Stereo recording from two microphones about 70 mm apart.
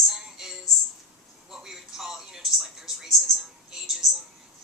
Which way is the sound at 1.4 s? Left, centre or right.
Centre.